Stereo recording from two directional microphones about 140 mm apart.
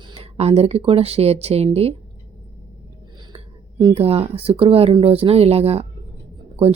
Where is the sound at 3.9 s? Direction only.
45° right (ahead or behind).